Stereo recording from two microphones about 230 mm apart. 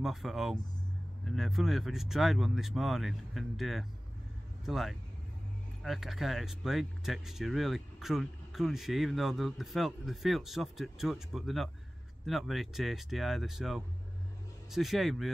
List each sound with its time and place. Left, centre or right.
0.0 s speech: centre